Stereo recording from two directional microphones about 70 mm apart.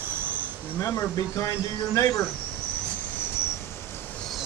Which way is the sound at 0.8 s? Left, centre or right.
Left.